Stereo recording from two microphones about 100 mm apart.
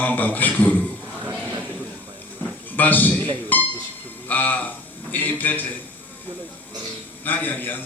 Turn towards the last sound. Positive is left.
turn(degrees=20)  # may be behind; listen again after turning